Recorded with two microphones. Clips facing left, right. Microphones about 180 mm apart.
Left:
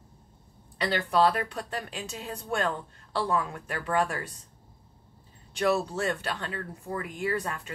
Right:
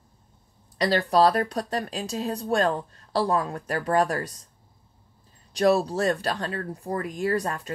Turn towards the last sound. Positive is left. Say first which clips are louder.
# right 5 dB
turn(degrees=-40)  # may be behind; listen again after turning